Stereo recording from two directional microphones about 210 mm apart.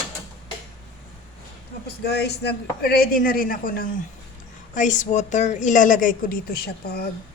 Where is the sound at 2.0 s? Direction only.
50° left (ahead or behind).